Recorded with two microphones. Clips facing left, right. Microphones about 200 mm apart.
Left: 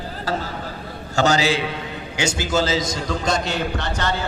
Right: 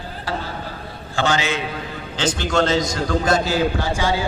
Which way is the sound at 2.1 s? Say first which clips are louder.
Right 2 dB; 10° left (ahead or behind).